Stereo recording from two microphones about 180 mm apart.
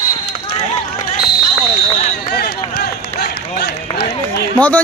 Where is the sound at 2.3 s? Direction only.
60° left (ahead or behind).